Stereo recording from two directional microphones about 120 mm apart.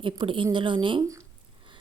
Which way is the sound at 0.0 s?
45° right (ahead or behind).